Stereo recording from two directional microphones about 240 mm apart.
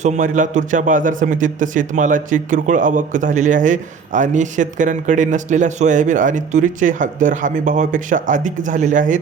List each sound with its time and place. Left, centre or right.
0.0 s a man's voice: right